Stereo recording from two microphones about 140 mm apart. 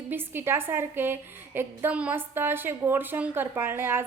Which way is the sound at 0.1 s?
15° right (ahead or behind).